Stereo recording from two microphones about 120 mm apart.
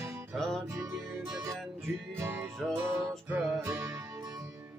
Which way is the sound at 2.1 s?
20° right (ahead or behind).